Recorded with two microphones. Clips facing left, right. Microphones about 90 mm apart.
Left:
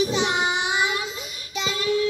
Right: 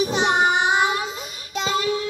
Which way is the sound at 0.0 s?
50° right (ahead or behind).